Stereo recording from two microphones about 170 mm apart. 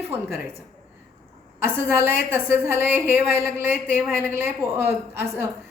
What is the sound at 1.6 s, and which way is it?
A woman's voice, 15° right (ahead or behind).